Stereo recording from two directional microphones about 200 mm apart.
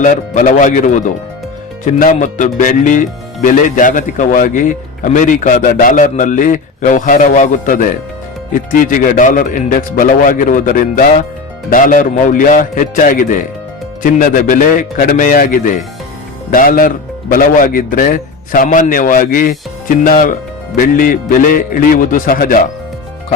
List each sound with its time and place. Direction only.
0.0 s a man's voice: 40° left (ahead or behind)